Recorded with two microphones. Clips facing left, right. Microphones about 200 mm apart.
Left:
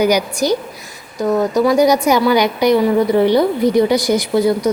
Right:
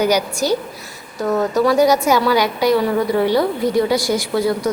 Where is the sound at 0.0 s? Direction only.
10° left (ahead or behind).